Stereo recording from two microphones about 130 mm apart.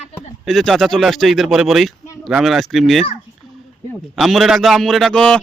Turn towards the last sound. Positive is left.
turn(degrees=5)  # may be behind; listen again after turning